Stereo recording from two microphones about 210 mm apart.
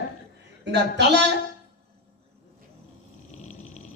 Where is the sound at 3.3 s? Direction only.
35° left (ahead or behind).